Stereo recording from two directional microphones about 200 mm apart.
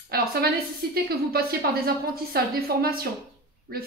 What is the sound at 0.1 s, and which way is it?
A woman's voice, 50° right (ahead or behind).